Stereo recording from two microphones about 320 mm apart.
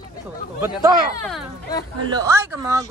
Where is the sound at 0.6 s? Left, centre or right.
Centre.